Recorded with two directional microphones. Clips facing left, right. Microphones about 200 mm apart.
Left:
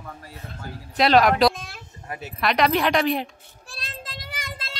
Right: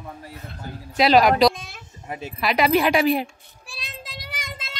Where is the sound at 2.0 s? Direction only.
15° right (ahead or behind).